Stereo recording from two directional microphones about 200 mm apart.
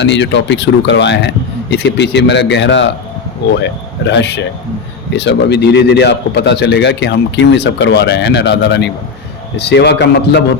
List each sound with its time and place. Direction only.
0.0 s a man's voice: 60° left (ahead or behind)